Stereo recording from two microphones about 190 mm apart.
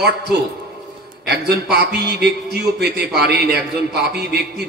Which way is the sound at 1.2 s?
60° right (ahead or behind).